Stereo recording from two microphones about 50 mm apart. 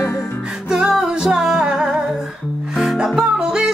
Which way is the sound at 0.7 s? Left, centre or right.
Centre.